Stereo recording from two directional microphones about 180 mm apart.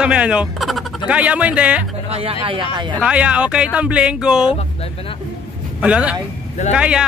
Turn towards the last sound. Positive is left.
turn(degrees=-5)  # may be behind; listen again after turning